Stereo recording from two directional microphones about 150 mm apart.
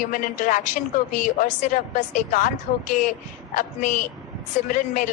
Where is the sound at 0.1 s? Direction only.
60° left (ahead or behind).